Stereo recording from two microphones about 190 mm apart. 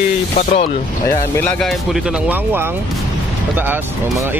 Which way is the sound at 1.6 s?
Centre (ahead or behind).